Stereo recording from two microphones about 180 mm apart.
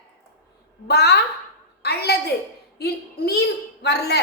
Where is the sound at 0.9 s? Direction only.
65° left (ahead or behind).